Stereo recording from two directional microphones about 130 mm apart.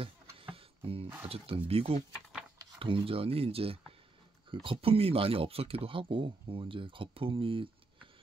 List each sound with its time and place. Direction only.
0.0 s music: 45° right (ahead or behind)
1.2 s speech: 50° right (ahead or behind)